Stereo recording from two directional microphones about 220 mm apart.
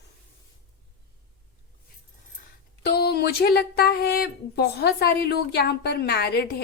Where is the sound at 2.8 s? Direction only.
45° left (ahead or behind).